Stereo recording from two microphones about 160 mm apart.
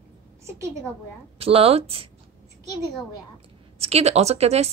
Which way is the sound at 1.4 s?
35° right (ahead or behind).